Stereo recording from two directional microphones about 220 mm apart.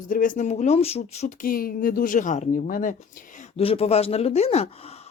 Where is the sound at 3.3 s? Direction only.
25° left (ahead or behind).